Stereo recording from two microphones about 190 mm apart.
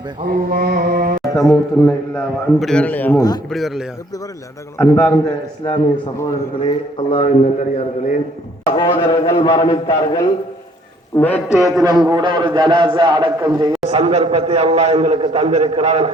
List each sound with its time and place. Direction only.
0.2 s mantra: 50° right (ahead or behind)
1.3 s a man's voice: 20° left (ahead or behind)
1.8 s a man's voice: 5° left (ahead or behind)
3.2 s a man's voice: 20° left (ahead or behind)
3.5 s a man's voice: centre (ahead or behind)
4.8 s a man's voice: 10° left (ahead or behind); by 8.2 s 40° left (ahead or behind)
8.7 s a man's voice: 25° left (ahead or behind)
11.2 s a man's voice: 10° left (ahead or behind)
11.9 s a man's voice: 20° right (ahead or behind)